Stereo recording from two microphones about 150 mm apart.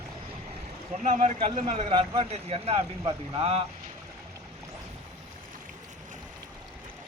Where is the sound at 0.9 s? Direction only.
55° right (ahead or behind).